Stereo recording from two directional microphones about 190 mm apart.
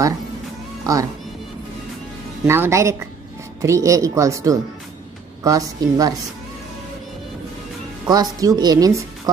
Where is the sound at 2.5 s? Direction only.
15° right (ahead or behind).